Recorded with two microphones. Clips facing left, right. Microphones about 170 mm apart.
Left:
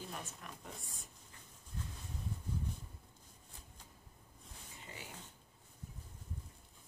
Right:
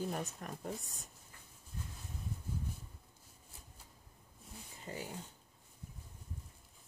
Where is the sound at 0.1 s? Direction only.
45° right (ahead or behind).